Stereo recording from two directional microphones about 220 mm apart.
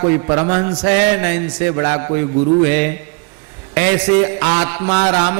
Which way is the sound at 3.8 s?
15° right (ahead or behind).